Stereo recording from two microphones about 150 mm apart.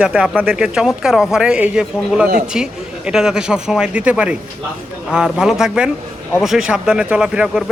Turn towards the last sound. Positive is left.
turn(degrees=-5)  # may be behind; listen again after turning